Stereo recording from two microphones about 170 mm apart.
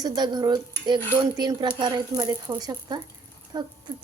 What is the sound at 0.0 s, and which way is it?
Speech, 25° right (ahead or behind).